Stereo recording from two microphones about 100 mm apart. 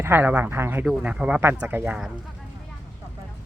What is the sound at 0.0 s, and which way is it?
Speech, 20° right (ahead or behind).